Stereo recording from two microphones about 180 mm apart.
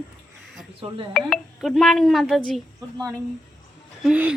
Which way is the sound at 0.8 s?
35° right (ahead or behind).